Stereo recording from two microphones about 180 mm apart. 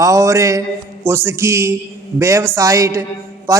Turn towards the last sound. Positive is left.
turn(degrees=-15)  # may be behind; listen again after turning